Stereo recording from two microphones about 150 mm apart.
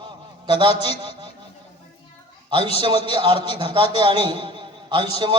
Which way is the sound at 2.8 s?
30° right (ahead or behind).